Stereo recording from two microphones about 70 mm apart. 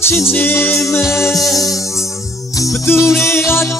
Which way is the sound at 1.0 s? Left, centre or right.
Left.